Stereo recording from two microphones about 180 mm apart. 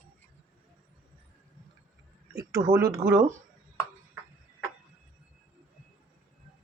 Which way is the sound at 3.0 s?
15° right (ahead or behind).